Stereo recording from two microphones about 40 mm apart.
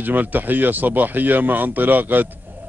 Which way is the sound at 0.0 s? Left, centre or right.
Right.